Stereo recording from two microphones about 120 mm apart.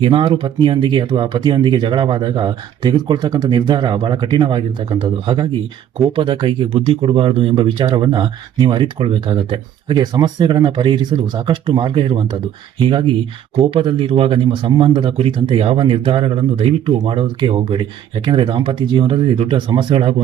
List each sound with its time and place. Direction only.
0.0 s speech: 45° right (ahead or behind)